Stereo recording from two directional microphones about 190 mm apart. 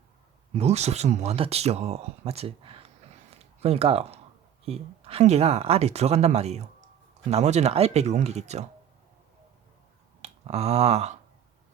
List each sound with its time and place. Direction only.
0.5 s speech: 35° right (ahead or behind)
10.2 s speech: 35° right (ahead or behind)